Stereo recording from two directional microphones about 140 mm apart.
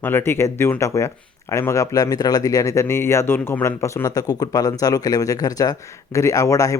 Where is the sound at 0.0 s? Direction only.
15° left (ahead or behind).